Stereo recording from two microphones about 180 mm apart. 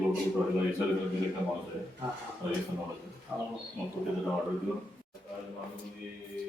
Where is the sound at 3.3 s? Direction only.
10° right (ahead or behind).